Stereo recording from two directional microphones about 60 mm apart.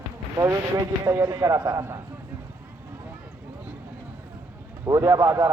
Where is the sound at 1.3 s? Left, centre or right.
Right.